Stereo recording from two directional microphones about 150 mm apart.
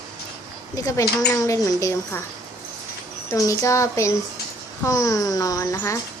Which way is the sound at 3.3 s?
20° left (ahead or behind).